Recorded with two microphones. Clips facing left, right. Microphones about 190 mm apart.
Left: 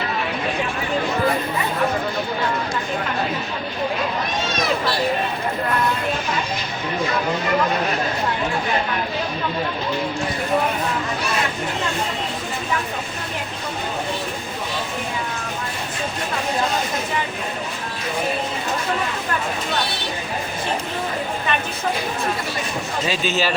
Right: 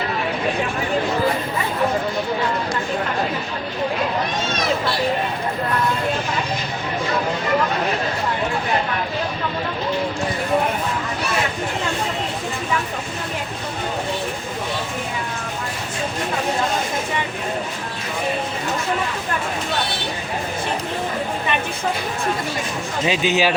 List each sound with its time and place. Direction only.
23.0 s speech: 15° right (ahead or behind)